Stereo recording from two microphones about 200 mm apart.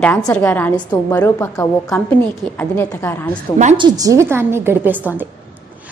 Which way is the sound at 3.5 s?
35° right (ahead or behind).